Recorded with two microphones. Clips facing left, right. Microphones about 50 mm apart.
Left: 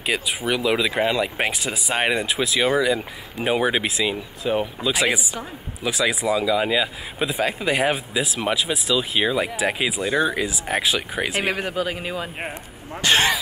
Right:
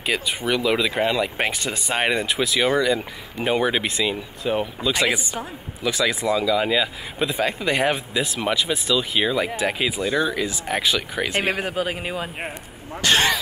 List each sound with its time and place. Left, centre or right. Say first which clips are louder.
0.0 s speech: even; centre
10.0 s speech: left 2 dB; centre
10.4 s speech: even; centre
11.7 s a man's voice: even; right
12.4 s speech: even; centre
13.0 s speech: even; centre